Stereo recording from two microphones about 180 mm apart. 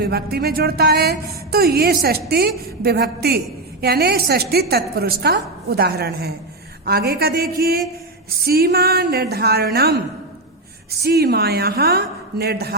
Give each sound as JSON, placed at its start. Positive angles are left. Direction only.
{"t": 0.0, "sound": "a woman's voice", "side_deg": -60}
{"t": 11.0, "sound": "a woman's voice", "side_deg": -60}